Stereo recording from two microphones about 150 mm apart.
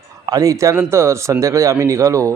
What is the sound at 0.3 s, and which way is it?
A man's voice, 25° right (ahead or behind).